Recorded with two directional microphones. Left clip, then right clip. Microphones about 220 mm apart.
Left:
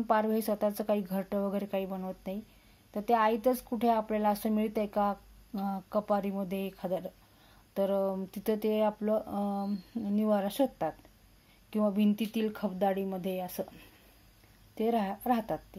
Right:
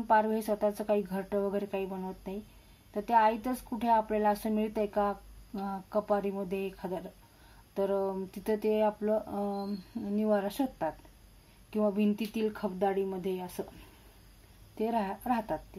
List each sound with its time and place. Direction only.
0.1 s speech: 35° left (ahead or behind)
14.8 s speech: 35° left (ahead or behind)